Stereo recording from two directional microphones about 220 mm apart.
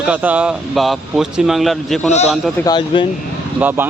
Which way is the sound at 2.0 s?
30° left (ahead or behind).